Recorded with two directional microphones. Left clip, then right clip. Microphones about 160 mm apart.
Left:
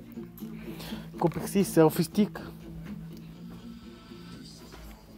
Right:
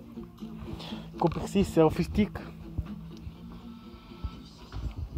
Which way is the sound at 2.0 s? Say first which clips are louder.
Left 2 dB; 30° left (ahead or behind).